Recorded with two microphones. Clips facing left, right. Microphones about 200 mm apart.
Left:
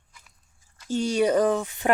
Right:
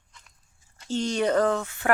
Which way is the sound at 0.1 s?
5° left (ahead or behind).